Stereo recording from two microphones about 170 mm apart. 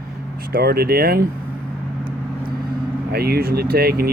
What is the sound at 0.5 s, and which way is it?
Speech, 65° right (ahead or behind).